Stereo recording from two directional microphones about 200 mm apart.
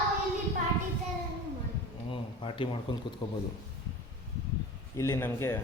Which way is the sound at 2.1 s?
25° left (ahead or behind).